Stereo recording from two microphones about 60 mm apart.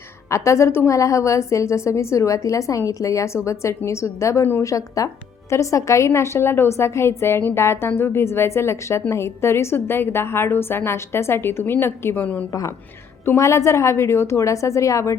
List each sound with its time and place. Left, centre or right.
0.3 s a woman's voice: left
0.9 s a woman's voice: left
13.2 s a woman's voice: left